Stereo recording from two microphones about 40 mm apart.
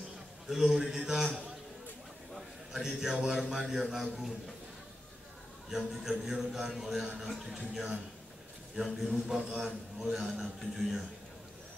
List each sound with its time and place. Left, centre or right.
0.5 s a man's voice: centre
2.7 s a man's voice: centre
5.7 s a man's voice: centre